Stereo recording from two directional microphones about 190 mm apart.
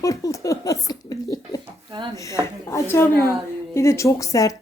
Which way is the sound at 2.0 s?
25° right (ahead or behind).